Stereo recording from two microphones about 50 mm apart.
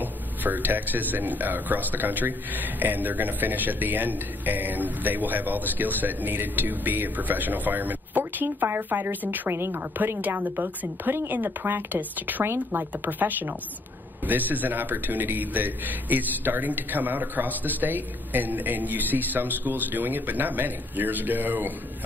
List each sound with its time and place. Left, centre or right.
0.0 s speech: right
8.5 s speech: right
9.5 s speech: right
12.4 s speech: right